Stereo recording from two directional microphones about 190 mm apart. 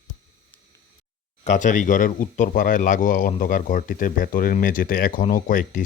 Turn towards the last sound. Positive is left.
turn(degrees=45)  # may be behind; listen again after turning